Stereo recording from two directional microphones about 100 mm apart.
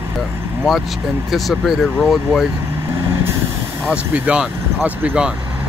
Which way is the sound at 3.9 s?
10° right (ahead or behind).